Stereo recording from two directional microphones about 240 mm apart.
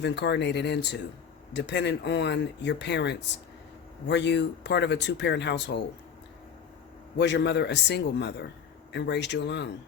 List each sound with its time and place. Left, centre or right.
0.0 s speech: left
7.2 s speech: left